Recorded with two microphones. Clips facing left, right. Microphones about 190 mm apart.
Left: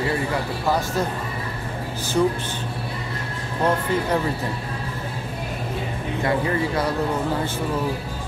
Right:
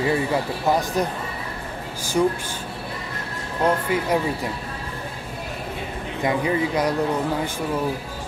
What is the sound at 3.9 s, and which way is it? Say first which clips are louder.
Speech: even; 10° right (ahead or behind).